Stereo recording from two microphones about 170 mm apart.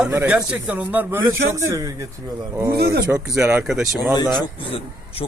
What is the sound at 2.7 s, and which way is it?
Speech, 70° right (ahead or behind).